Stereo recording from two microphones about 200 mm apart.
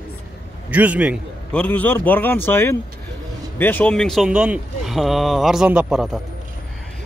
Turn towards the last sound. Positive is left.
turn(degrees=-5)  # may be behind; listen again after turning